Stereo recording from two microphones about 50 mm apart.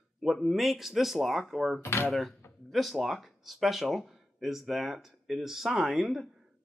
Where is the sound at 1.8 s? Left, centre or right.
Left.